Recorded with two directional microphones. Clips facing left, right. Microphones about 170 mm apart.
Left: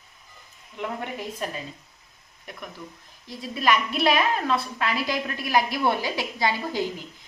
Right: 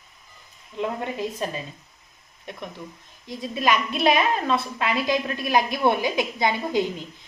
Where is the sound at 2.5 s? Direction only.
25° right (ahead or behind).